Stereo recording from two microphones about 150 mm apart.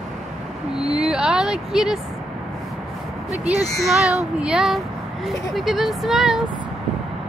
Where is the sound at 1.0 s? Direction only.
5° right (ahead or behind).